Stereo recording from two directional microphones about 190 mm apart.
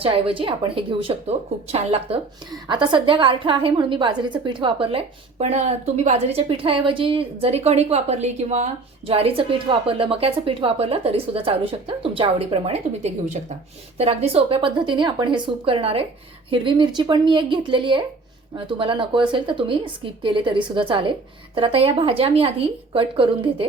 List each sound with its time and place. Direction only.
0.0 s a woman's voice: 30° right (ahead or behind)